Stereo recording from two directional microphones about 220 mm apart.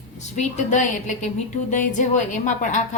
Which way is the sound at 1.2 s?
35° left (ahead or behind).